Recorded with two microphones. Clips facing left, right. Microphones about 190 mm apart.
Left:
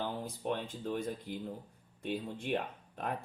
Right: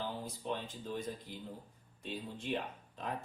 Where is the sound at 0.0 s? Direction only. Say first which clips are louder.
Left 4 dB; 60° left (ahead or behind).